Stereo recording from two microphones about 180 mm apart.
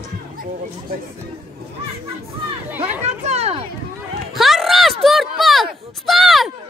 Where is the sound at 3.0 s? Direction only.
35° right (ahead or behind).